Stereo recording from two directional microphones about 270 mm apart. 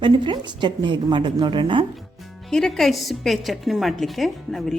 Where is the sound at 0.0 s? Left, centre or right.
Centre.